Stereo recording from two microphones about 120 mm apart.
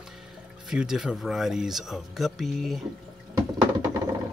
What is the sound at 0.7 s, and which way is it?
Speech, 5° right (ahead or behind).